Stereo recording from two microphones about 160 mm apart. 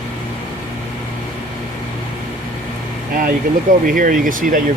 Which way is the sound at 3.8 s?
60° right (ahead or behind).